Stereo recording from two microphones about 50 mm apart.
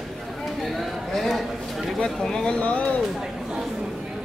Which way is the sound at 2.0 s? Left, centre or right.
Centre.